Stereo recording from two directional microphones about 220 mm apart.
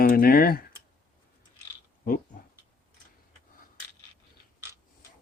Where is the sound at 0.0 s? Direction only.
40° left (ahead or behind).